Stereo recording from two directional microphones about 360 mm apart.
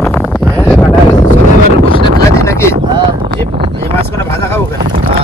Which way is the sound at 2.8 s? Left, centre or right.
Centre.